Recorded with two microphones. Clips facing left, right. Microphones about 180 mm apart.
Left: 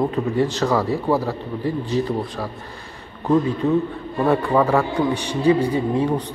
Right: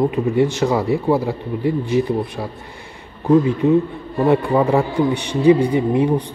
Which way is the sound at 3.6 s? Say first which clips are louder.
Right 4 dB; 20° right (ahead or behind).